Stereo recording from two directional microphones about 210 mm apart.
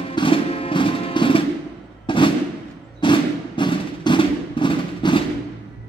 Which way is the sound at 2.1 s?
25° left (ahead or behind).